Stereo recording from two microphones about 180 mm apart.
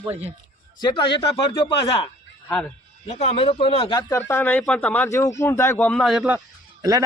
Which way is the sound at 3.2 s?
35° left (ahead or behind).